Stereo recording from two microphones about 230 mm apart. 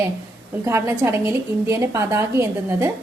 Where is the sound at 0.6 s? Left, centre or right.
Centre.